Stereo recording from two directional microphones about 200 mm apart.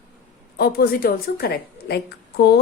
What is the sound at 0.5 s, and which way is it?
A woman's voice, 50° left (ahead or behind).